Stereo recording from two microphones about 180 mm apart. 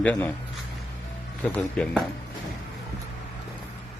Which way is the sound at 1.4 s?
5° left (ahead or behind).